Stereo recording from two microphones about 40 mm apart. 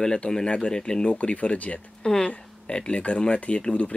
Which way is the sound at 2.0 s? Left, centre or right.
Centre.